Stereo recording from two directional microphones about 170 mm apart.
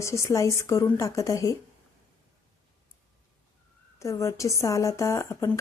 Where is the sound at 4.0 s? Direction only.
15° left (ahead or behind).